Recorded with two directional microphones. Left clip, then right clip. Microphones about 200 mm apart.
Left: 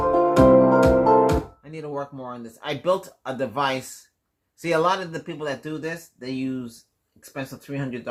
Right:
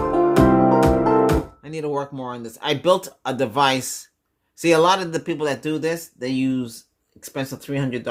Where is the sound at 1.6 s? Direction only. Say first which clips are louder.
Right 6 dB; 40° right (ahead or behind).